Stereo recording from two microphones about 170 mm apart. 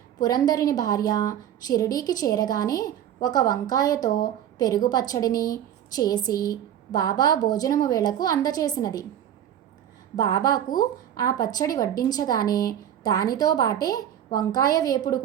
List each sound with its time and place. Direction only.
0.2 s speech: 25° left (ahead or behind)
10.2 s speech: 25° left (ahead or behind)